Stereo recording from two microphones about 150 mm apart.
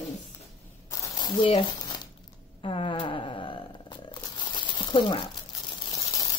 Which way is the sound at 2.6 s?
35° left (ahead or behind).